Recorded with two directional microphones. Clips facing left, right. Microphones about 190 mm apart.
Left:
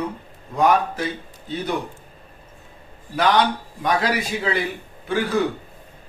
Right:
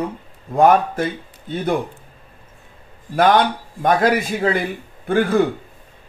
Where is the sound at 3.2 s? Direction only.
50° right (ahead or behind).